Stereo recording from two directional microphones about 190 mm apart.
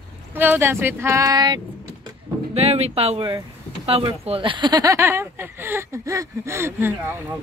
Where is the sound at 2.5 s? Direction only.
35° right (ahead or behind); by 7.3 s 10° right (ahead or behind).